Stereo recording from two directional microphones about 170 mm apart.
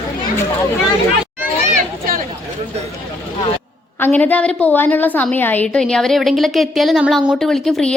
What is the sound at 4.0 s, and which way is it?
A woman's voice, 10° left (ahead or behind).